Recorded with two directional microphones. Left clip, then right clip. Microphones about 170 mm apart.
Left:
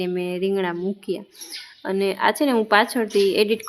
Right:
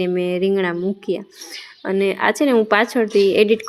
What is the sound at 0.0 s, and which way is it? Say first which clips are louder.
A woman's voice: right 5 dB; 15° right (ahead or behind).